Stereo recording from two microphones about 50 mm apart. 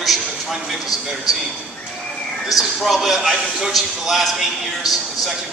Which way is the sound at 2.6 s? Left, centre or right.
Centre.